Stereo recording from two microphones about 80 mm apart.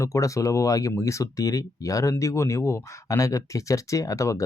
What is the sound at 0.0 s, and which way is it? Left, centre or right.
Speech, left.